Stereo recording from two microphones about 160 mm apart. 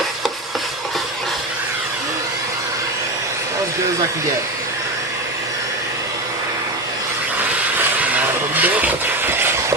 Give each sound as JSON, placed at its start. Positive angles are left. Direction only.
{"t": 8.0, "sound": "vehicle", "side_deg": -10}